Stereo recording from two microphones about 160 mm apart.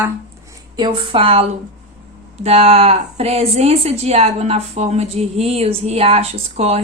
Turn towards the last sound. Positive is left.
turn(degrees=-40)  # may be behind; listen again after turning